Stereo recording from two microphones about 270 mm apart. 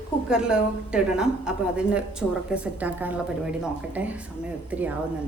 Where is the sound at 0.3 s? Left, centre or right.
Centre.